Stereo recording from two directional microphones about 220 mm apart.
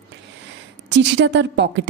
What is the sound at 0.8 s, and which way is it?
Speech, 55° right (ahead or behind).